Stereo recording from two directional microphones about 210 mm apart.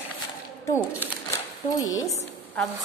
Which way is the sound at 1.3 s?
15° left (ahead or behind).